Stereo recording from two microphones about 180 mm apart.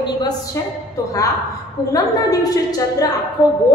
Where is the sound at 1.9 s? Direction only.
20° left (ahead or behind).